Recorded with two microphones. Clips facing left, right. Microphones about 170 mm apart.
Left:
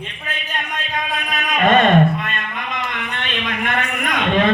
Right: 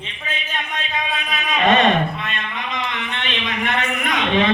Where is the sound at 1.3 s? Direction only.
50° left (ahead or behind).